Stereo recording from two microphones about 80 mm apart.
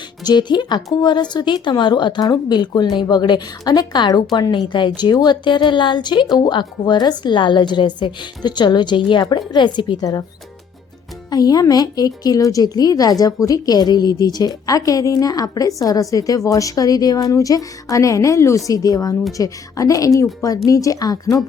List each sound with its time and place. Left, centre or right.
0.3 s a woman's voice: left
3.6 s a woman's voice: left
9.5 s a woman's voice: left
10.0 s a woman's voice: left
11.3 s a woman's voice: left